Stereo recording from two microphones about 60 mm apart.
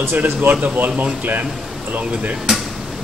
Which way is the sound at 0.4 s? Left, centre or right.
Right.